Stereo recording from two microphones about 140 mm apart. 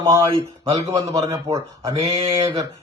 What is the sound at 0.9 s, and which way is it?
A man's voice, 25° right (ahead or behind).